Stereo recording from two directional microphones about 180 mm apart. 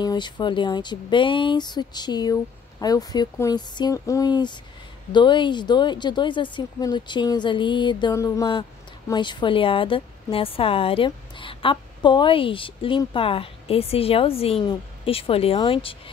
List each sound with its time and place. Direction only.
0.0 s a woman's voice: 25° left (ahead or behind)